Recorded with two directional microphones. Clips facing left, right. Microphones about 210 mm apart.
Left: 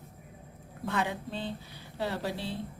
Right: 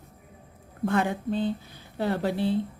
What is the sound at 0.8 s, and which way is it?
A woman's voice, 50° right (ahead or behind).